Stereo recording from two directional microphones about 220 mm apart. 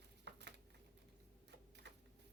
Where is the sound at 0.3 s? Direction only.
50° right (ahead or behind).